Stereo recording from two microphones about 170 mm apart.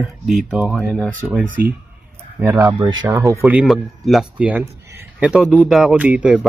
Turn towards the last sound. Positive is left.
turn(degrees=-5)  # may be behind; listen again after turning